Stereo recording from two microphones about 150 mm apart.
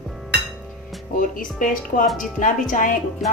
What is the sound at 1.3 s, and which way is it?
Speech, 65° left (ahead or behind).